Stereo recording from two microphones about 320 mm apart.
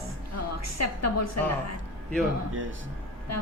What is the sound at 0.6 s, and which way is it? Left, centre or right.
A woman's voice, left.